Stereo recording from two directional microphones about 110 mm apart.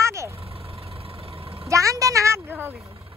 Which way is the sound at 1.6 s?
30° right (ahead or behind).